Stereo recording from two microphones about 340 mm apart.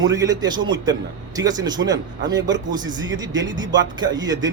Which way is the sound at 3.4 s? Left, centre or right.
Centre.